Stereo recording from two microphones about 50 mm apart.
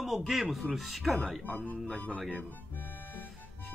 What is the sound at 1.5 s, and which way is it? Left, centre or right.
Speech, left.